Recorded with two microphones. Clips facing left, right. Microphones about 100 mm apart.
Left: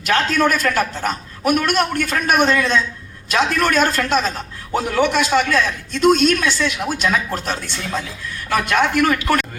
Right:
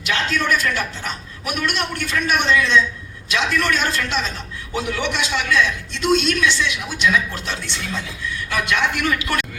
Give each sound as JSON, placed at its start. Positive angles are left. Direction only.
{"t": 0.0, "sound": "a man's voice", "side_deg": 45}